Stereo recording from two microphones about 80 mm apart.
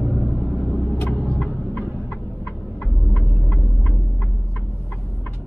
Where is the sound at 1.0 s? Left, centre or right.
Left.